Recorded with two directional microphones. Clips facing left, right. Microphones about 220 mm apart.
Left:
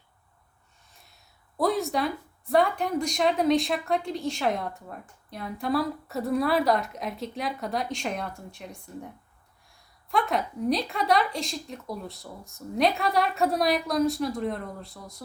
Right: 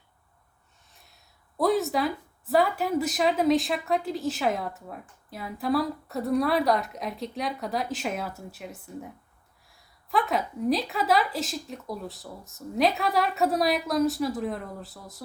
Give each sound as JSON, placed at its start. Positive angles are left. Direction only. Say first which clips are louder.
{"t": 1.5, "sound": "a woman's voice", "louder": "right 1 dB", "side_deg": 0}